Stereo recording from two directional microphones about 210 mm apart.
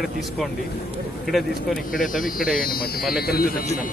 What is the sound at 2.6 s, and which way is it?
Speech, 45° left (ahead or behind).